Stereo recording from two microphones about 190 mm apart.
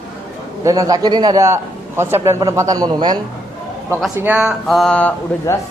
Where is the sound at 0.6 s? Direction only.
15° right (ahead or behind).